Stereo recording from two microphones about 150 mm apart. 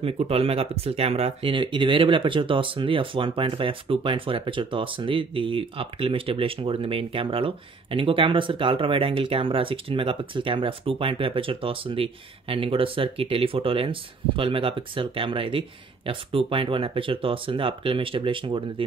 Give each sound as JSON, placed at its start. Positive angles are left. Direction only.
{"t": 0.0, "sound": "speech", "side_deg": -40}